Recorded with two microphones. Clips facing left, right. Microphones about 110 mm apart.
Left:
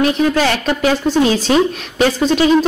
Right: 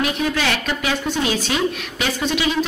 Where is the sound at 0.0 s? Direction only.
40° left (ahead or behind).